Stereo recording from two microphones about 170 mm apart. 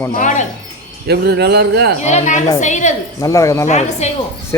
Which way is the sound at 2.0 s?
45° left (ahead or behind).